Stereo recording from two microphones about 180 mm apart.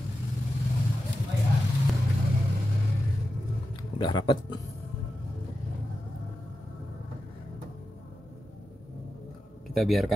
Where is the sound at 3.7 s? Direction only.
25° left (ahead or behind).